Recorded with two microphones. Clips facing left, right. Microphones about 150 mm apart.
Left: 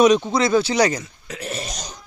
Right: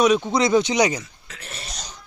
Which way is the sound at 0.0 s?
Centre (ahead or behind).